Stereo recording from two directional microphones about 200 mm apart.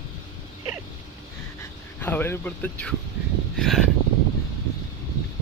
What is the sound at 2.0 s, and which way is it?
Speech, 10° left (ahead or behind).